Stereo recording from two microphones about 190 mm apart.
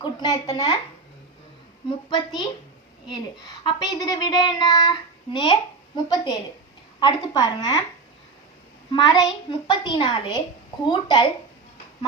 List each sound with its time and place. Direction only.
0.0 s speech: 25° left (ahead or behind)
2.0 s speech: 25° left (ahead or behind)
8.9 s speech: 25° left (ahead or behind)